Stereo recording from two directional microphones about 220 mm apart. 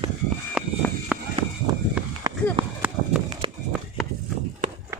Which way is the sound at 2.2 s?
15° right (ahead or behind).